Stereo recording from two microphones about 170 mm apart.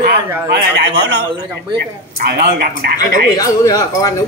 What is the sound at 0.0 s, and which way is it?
Speech, 80° right.